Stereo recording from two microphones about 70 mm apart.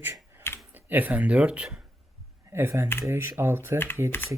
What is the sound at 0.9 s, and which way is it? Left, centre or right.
Speech, right.